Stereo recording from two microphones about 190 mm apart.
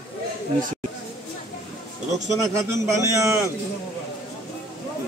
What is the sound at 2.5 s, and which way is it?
Speech, 15° right (ahead or behind).